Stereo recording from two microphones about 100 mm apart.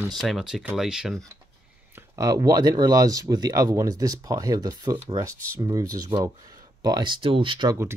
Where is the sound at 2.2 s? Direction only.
35° right (ahead or behind).